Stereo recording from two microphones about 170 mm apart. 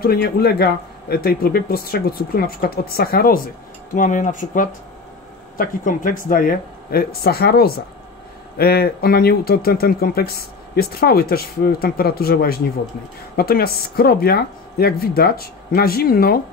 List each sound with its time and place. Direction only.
0.0 s speech: 65° left (ahead or behind)
3.9 s speech: 50° left (ahead or behind)